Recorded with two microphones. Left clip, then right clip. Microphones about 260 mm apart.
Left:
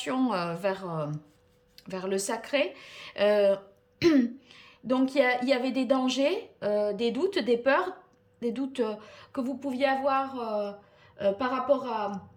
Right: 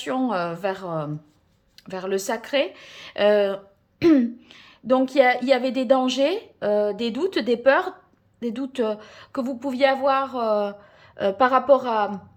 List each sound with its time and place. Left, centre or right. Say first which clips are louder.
0.0 s a woman's voice: right 5 dB; centre